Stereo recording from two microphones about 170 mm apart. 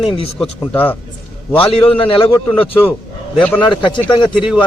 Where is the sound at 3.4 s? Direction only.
10° left (ahead or behind).